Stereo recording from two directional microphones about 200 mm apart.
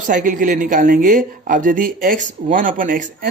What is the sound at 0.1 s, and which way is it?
Speech, 40° right (ahead or behind).